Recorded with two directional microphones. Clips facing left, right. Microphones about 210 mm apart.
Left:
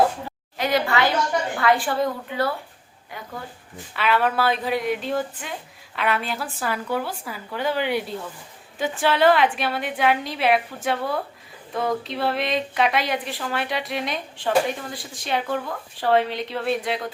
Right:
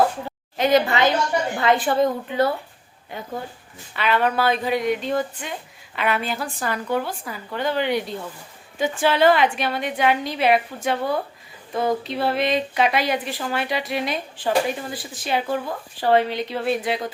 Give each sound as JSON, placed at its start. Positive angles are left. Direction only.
{"t": 0.5, "sound": "a woman's voice", "side_deg": -20}
{"t": 3.9, "sound": "a woman's voice", "side_deg": 5}